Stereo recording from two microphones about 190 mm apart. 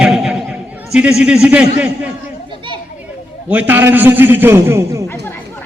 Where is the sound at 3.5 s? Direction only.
10° right (ahead or behind).